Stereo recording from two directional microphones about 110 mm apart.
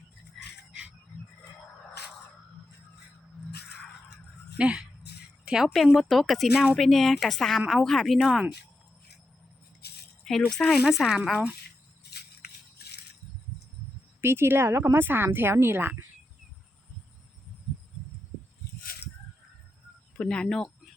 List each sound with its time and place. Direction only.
0.4 s music: centre (ahead or behind)
4.5 s dog: 10° right (ahead or behind)
5.5 s speech: 10° right (ahead or behind)
10.2 s speech: 5° left (ahead or behind)
14.2 s speech: 20° right (ahead or behind)
20.1 s speech: 10° left (ahead or behind)